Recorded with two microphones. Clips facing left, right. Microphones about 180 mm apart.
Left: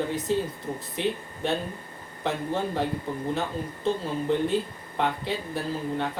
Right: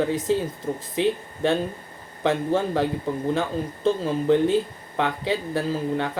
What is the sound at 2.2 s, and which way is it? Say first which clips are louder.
Speech: right 6 dB; 90° right.